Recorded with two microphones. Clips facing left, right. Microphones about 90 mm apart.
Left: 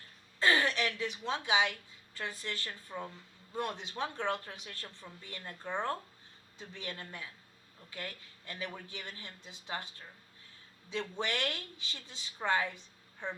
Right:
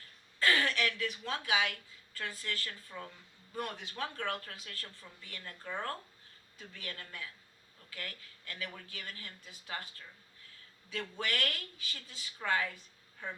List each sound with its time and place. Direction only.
0.3 s a woman's voice: 20° left (ahead or behind)